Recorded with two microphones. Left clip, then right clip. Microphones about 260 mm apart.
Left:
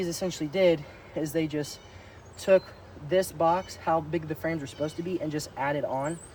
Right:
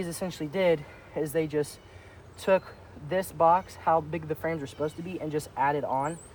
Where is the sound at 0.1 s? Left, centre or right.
Centre.